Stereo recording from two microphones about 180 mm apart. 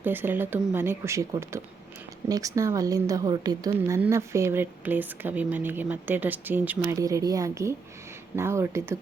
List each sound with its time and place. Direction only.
0.0 s a woman's voice: 10° right (ahead or behind)